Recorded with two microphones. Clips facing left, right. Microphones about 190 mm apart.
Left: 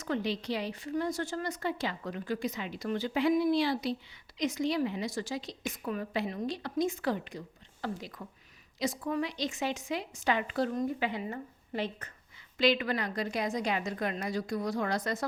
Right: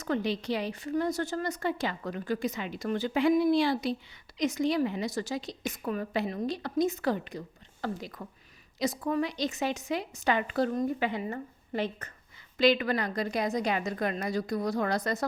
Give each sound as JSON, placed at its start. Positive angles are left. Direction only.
{"t": 0.0, "sound": "a woman's voice", "side_deg": -45}